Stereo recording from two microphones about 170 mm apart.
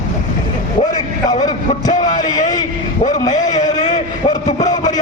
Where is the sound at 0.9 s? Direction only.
25° left (ahead or behind).